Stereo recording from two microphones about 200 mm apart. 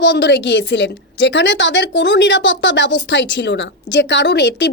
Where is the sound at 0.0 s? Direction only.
60° left (ahead or behind).